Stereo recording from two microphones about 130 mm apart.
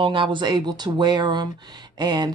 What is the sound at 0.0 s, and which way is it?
Speech, 40° right (ahead or behind).